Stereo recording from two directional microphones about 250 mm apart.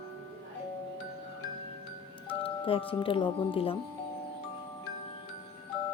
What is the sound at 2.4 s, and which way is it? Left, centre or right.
Speech, left.